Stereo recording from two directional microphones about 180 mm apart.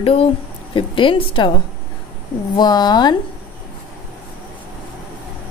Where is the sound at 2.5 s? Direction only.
25° left (ahead or behind).